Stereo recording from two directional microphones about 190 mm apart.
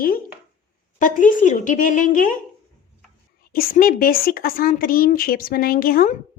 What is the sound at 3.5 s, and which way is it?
A woman's voice, 50° left (ahead or behind).